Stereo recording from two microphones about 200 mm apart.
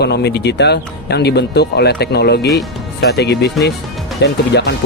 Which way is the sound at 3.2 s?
55° left (ahead or behind).